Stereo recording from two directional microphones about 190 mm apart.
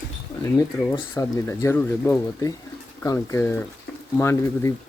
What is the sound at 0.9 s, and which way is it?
Speech, 15° left (ahead or behind).